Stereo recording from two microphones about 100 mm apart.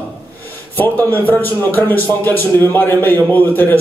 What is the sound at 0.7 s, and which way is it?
A man's voice, 20° left (ahead or behind).